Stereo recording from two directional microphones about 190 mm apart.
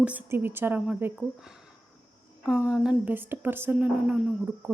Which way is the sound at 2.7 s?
5° right (ahead or behind).